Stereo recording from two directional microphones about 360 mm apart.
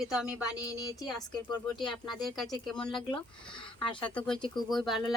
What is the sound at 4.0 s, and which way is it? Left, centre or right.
Speech, centre.